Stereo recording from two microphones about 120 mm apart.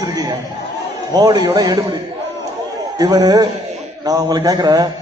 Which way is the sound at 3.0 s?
35° right (ahead or behind).